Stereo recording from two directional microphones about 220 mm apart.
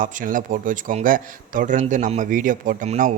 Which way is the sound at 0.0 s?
35° right (ahead or behind).